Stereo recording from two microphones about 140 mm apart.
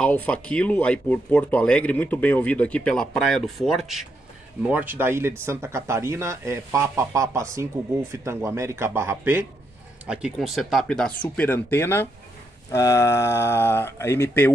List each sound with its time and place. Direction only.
0.0 s speech: 10° left (ahead or behind)
4.6 s speech: 15° right (ahead or behind); by 14.5 s 15° left (ahead or behind)